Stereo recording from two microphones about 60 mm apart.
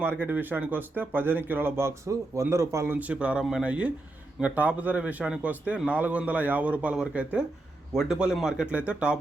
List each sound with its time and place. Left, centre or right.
0.0 s speech: right
2.9 s speech: right
6.9 s speech: centre